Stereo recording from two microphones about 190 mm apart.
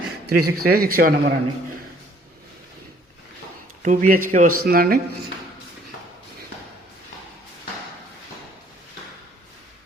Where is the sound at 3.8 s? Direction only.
40° right (ahead or behind).